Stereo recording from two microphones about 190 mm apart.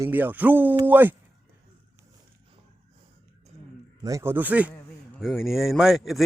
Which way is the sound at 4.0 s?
15° right (ahead or behind).